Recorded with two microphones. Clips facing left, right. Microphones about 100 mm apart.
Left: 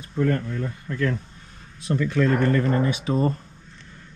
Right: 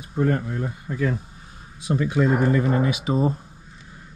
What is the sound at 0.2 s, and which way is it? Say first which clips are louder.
Speech: right 1 dB; 15° right (ahead or behind).